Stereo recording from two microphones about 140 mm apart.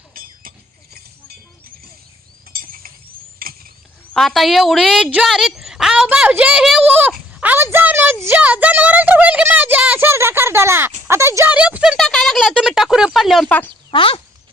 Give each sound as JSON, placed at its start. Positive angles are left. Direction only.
{"t": 0.1, "sound": "chink", "side_deg": -90}
{"t": 2.5, "sound": "a sound", "side_deg": -90}
{"t": 4.1, "sound": "a woman's voice", "side_deg": 0}
{"t": 7.4, "sound": "a sound", "side_deg": -15}
{"t": 11.5, "sound": "speech", "side_deg": -10}
{"t": 13.9, "sound": "speech", "side_deg": 40}